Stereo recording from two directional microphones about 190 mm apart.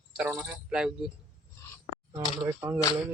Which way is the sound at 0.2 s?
5° right (ahead or behind).